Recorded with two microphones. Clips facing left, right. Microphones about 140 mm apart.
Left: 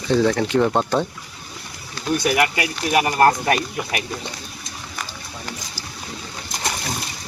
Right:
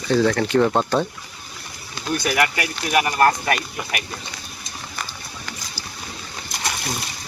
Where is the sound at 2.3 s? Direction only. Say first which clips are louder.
Left 1 dB; 20° left (ahead or behind).